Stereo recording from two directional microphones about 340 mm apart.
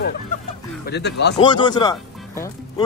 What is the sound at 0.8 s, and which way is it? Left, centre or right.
Speech, left.